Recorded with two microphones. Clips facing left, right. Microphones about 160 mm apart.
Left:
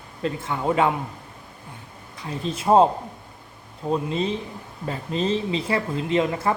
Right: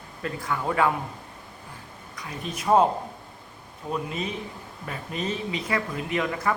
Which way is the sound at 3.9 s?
30° left (ahead or behind).